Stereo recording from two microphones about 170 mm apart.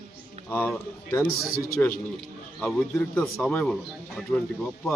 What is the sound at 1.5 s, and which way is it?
Speech, 60° left (ahead or behind).